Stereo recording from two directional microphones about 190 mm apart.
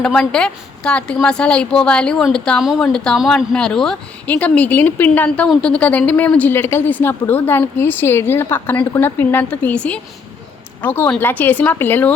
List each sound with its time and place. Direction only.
0.0 s a woman's voice: 5° left (ahead or behind)